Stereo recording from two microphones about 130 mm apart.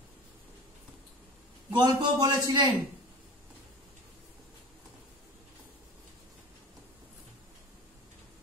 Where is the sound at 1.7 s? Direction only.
30° right (ahead or behind).